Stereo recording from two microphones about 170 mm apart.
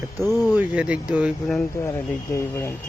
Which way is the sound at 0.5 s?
10° right (ahead or behind).